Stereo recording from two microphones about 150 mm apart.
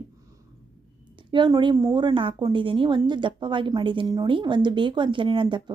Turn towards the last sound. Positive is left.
turn(degrees=-30)  # may be behind; listen again after turning